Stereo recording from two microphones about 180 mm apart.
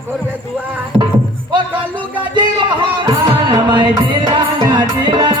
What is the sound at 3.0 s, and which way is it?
Music, 25° right (ahead or behind).